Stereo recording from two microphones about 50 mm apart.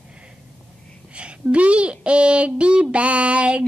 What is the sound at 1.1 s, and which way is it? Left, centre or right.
Speech, right.